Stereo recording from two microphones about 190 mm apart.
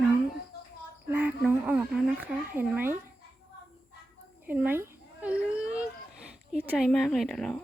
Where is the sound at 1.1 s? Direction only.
10° right (ahead or behind).